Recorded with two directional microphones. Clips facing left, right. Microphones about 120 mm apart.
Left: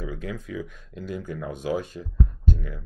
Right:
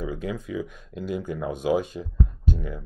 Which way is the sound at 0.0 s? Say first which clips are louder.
Right 3 dB; 20° right (ahead or behind).